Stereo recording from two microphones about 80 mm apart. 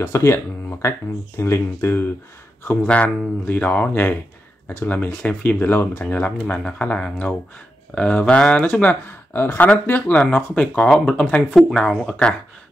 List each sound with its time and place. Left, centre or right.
0.0 s speech: left
1.4 s speech: left
2.6 s speech: centre
9.3 s speech: left